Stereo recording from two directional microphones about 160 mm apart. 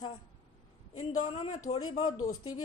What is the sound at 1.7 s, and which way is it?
Speech, 25° left (ahead or behind).